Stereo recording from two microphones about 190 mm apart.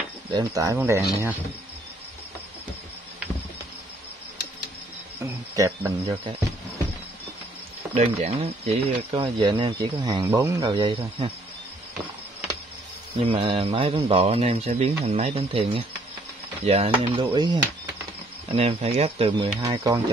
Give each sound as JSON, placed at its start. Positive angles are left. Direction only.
{"t": 0.3, "sound": "speech", "side_deg": -20}
{"t": 5.2, "sound": "speech", "side_deg": -15}
{"t": 7.9, "sound": "speech", "side_deg": -35}
{"t": 13.2, "sound": "speech", "side_deg": -30}